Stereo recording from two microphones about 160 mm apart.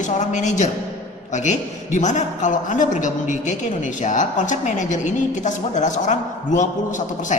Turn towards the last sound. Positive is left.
turn(degrees=50)  # may be behind; listen again after turning